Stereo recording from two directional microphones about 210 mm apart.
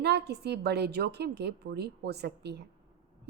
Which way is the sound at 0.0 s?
55° right (ahead or behind).